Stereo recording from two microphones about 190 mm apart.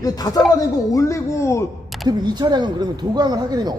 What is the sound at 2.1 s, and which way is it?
Speech, 20° right (ahead or behind).